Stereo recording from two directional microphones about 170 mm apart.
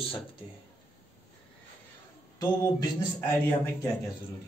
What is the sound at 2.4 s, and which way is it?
Mantra, 25° left (ahead or behind).